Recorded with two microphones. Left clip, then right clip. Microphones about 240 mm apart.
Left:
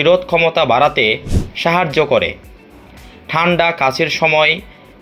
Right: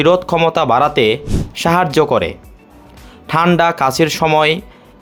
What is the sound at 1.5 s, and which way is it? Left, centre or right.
Speech, right.